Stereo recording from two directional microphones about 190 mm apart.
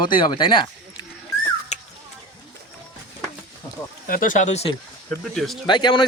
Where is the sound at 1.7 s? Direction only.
35° left (ahead or behind).